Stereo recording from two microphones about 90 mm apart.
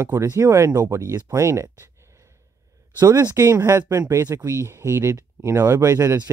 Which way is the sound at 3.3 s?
30° right (ahead or behind).